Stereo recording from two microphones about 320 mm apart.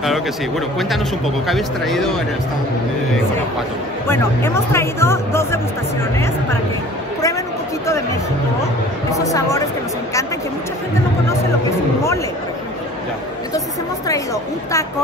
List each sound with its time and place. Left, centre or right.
0.7 s speech: centre
4.1 s speech: centre
7.8 s a woman's voice: centre
14.0 s a woman's voice: centre